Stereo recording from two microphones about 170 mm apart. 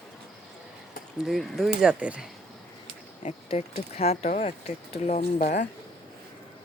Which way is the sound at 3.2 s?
35° left (ahead or behind).